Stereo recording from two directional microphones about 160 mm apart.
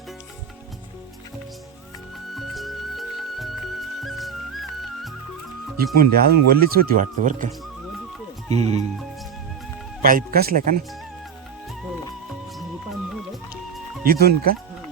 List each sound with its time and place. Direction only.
2.3 s music: centre (ahead or behind)
5.7 s speech: 70° right (ahead or behind); by 7.5 s 55° right (ahead or behind)
8.4 s speech: 40° right (ahead or behind)
10.0 s speech: 60° right (ahead or behind)
12.5 s music: centre (ahead or behind)
14.0 s speech: 75° right (ahead or behind)